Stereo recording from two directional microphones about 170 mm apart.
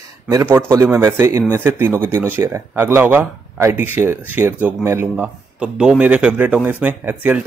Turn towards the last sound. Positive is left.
turn(degrees=-10)  # may be behind; listen again after turning